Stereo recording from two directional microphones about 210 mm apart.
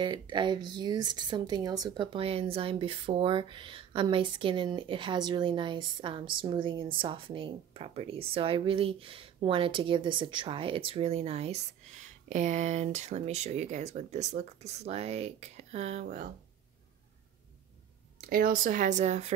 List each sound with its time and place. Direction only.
0.0 s speech: 20° right (ahead or behind); by 16.3 s 35° right (ahead or behind)
18.1 s speech: 45° right (ahead or behind)